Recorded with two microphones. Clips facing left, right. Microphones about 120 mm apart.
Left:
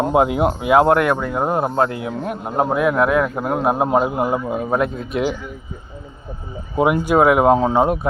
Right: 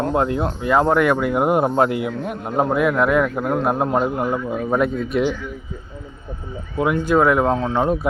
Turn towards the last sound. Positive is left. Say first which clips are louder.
# left 4 dB
turn(degrees=35)  # may be behind; listen again after turning